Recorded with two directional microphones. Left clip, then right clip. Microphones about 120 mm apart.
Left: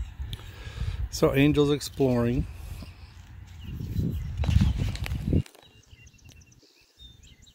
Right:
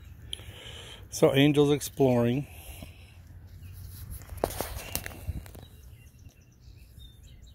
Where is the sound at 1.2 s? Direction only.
15° left (ahead or behind).